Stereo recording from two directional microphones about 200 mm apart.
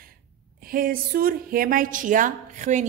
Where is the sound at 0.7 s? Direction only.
45° right (ahead or behind).